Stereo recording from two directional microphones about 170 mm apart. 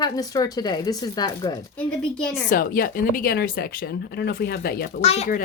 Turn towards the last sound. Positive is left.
turn(degrees=40)  # may be behind; listen again after turning